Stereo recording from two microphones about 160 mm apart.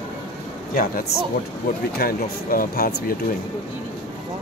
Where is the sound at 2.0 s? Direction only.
65° left (ahead or behind).